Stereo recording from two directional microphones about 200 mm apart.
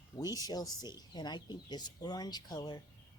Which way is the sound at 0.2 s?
20° left (ahead or behind).